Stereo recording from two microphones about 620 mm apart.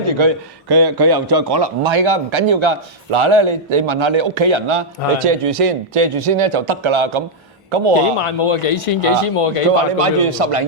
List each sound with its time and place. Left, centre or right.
0.2 s a man's voice: right
8.2 s speech: left
10.0 s a man's voice: right